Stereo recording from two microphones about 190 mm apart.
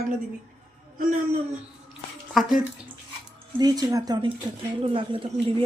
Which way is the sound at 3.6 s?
20° right (ahead or behind).